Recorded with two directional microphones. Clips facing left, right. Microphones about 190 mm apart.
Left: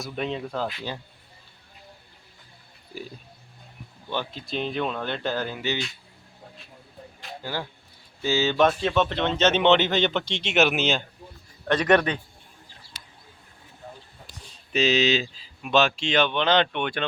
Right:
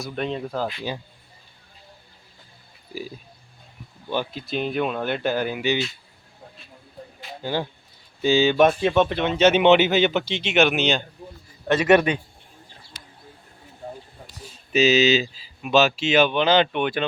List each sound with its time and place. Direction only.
0.0 s speech: centre (ahead or behind)
4.1 s a man's voice: 10° right (ahead or behind)
7.4 s a man's voice: 20° right (ahead or behind)
14.4 s speech: 5° right (ahead or behind)